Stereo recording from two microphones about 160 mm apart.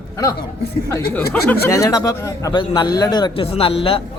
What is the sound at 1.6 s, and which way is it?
A man's voice, 20° left (ahead or behind).